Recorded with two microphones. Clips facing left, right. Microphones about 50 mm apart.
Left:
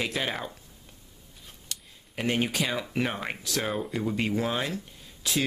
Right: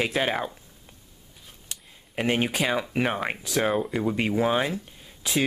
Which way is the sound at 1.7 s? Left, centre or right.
Right.